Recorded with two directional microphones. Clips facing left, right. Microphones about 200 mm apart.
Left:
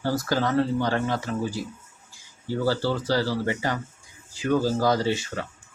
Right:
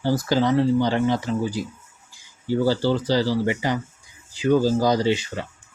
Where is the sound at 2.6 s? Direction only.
15° right (ahead or behind).